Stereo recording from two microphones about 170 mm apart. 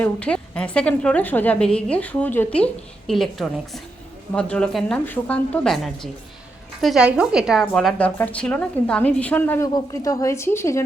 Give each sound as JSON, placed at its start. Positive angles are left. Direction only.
{"t": 0.0, "sound": "a woman's voice", "side_deg": 5}
{"t": 9.7, "sound": "a woman's voice", "side_deg": 20}